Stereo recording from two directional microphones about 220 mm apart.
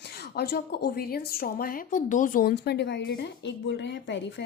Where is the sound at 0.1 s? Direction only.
45° left (ahead or behind).